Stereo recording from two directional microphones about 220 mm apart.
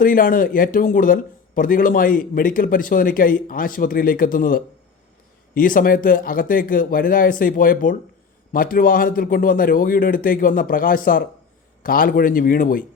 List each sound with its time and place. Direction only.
0.0 s a man's voice: 40° left (ahead or behind)